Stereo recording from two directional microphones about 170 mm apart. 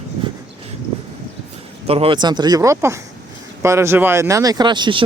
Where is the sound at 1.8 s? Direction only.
35° right (ahead or behind).